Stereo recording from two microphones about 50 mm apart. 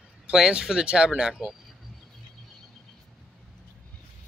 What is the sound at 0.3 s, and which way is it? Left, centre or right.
Speech, centre.